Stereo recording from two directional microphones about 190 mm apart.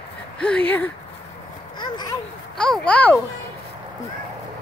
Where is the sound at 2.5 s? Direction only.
5° left (ahead or behind).